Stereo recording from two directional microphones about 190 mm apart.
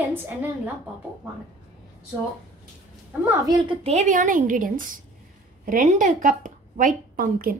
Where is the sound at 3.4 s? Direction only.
25° right (ahead or behind).